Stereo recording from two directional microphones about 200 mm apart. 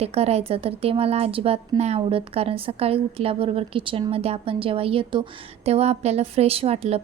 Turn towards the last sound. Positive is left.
turn(degrees=-30)  # may be behind; listen again after turning